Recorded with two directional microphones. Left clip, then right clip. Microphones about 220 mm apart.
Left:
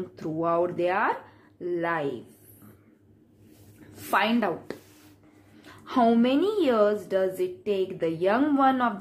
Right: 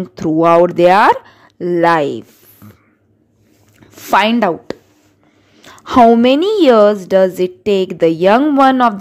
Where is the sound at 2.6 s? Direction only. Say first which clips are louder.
Right 12 dB; 40° right (ahead or behind).